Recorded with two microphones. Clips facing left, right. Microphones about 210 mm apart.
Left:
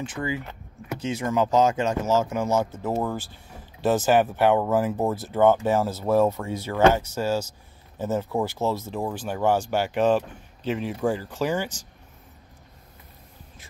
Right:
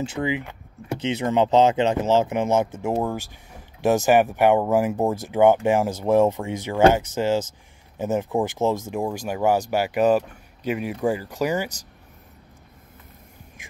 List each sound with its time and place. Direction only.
0.0 s speech: 25° right (ahead or behind)